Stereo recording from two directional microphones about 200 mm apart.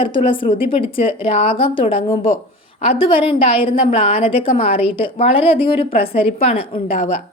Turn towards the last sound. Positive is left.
turn(degrees=30)  # may be behind; listen again after turning